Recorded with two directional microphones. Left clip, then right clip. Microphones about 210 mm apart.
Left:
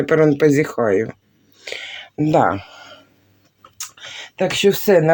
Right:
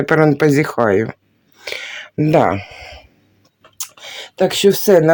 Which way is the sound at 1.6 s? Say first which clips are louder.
Right 3 dB; 30° right (ahead or behind).